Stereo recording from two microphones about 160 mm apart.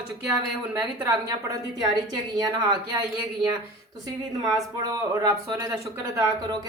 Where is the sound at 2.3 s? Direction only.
25° right (ahead or behind).